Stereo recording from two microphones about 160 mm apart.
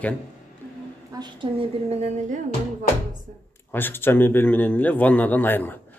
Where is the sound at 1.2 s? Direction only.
30° right (ahead or behind).